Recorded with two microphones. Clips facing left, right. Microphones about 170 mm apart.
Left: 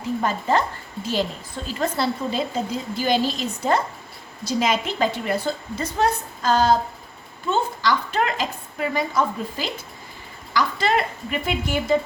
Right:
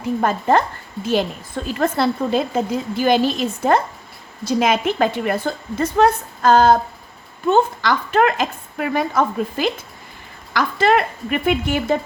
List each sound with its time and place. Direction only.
0.2 s a woman's voice: 55° right (ahead or behind)
1.6 s a woman's voice: 55° right (ahead or behind)